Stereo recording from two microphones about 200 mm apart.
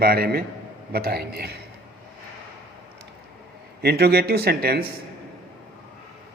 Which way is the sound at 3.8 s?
55° right (ahead or behind).